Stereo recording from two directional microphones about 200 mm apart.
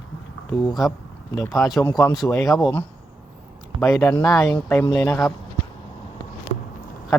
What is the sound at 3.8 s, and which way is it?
Speech, 15° left (ahead or behind).